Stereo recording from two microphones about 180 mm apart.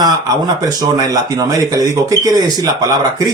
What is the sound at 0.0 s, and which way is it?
Speech, 20° right (ahead or behind).